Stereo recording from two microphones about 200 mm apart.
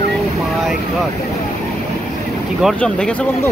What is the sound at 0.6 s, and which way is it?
Vehicle, centre (ahead or behind).